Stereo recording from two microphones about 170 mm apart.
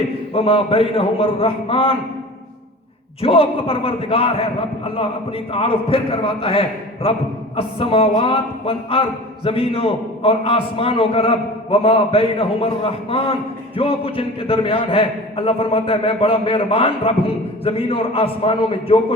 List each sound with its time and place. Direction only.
0.3 s a man's voice: 35° left (ahead or behind)
3.2 s a man's voice: 35° left (ahead or behind)
5.5 s a man's voice: 35° left (ahead or behind)